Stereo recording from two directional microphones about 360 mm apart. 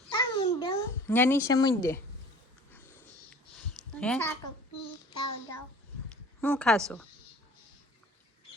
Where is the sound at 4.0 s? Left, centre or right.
Centre.